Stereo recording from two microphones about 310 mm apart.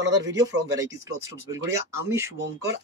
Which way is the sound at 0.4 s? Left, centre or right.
Centre.